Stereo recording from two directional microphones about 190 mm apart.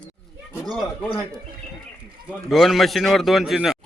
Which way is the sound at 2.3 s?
Centre (ahead or behind).